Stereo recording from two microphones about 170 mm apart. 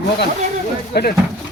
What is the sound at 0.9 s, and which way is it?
Speech, 70° left (ahead or behind).